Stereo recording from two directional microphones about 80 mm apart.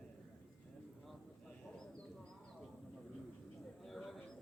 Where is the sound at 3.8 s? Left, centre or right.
Centre.